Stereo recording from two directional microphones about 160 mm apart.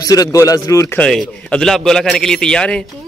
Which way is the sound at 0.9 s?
5° left (ahead or behind).